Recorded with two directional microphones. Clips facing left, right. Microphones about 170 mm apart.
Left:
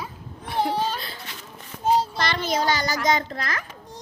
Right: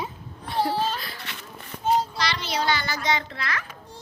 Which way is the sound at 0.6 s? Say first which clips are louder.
Left 1 dB; 15° left (ahead or behind).